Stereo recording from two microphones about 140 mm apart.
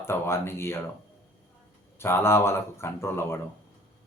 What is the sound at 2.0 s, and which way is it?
Speech, 20° left (ahead or behind).